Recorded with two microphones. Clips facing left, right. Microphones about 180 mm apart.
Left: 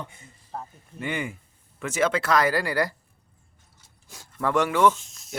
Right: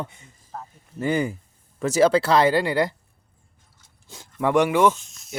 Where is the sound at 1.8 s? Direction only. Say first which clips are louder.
Right 7 dB; 35° right (ahead or behind).